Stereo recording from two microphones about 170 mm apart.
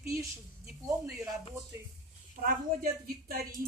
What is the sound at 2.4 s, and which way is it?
A woman's voice, 60° right (ahead or behind).